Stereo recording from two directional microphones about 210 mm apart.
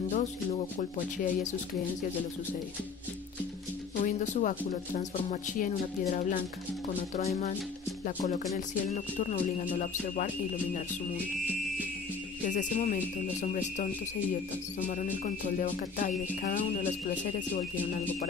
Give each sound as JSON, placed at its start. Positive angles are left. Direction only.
{"t": 0.1, "sound": "speech", "side_deg": 35}
{"t": 4.0, "sound": "speech", "side_deg": 35}
{"t": 12.4, "sound": "speech", "side_deg": 35}